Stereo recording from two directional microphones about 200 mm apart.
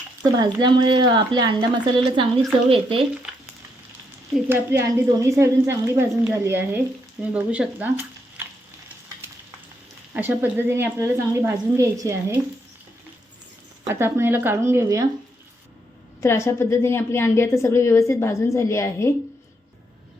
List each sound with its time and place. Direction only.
0.3 s a woman's voice: 20° right (ahead or behind)
3.3 s frying: 5° right (ahead or behind)
4.4 s a woman's voice: 10° right (ahead or behind)
10.2 s a woman's voice: 10° right (ahead or behind)
13.8 s a woman's voice: 10° right (ahead or behind)
16.2 s a woman's voice: 15° left (ahead or behind)